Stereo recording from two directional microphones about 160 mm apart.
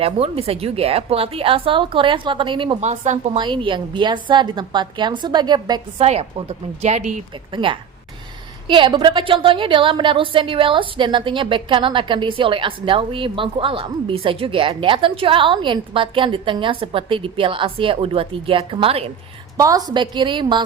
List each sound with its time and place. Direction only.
0.0 s a woman's voice: 35° right (ahead or behind)
2.8 s a woman's voice: 45° right (ahead or behind)
3.3 s a woman's voice: 30° right (ahead or behind)
6.0 s a woman's voice: 40° right (ahead or behind)
7.5 s a woman's voice: 30° right (ahead or behind)
19.5 s a woman's voice: 20° right (ahead or behind)